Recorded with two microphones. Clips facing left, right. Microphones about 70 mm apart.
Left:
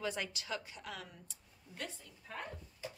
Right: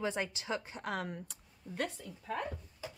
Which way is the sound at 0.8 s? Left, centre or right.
Right.